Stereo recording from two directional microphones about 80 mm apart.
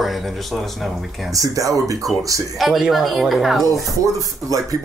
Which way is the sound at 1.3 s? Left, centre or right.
Right.